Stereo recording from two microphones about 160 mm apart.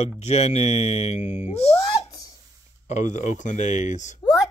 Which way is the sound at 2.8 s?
45° left (ahead or behind).